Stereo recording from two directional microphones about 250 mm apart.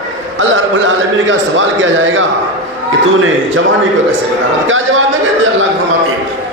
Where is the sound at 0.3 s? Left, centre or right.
Right.